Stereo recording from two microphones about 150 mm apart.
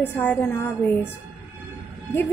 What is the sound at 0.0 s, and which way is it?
A woman's voice, 15° left (ahead or behind).